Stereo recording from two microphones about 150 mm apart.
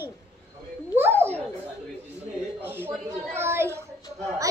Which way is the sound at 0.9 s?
15° right (ahead or behind).